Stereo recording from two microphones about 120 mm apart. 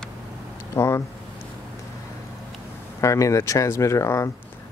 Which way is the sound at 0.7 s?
20° left (ahead or behind).